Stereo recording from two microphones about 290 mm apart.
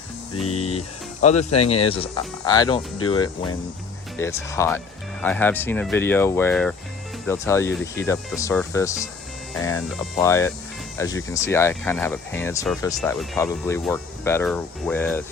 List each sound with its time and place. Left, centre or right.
0.5 s speech: left